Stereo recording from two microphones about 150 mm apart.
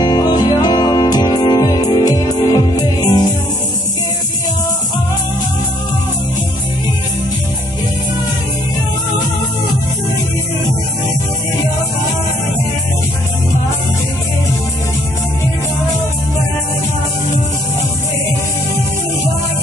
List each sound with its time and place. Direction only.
0.0 s music: 30° left (ahead or behind)